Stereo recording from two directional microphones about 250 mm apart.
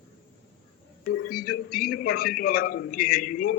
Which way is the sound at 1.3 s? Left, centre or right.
Left.